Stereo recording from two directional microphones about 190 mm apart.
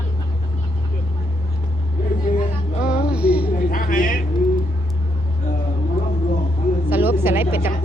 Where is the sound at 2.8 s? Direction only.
5° right (ahead or behind).